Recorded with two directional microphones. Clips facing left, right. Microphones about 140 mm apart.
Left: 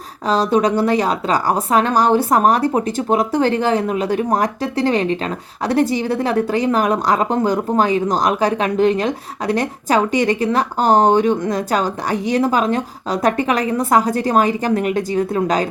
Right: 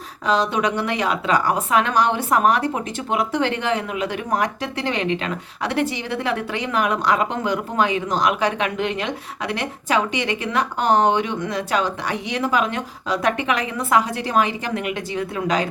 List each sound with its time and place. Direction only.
0.3 s a woman's voice: 35° left (ahead or behind)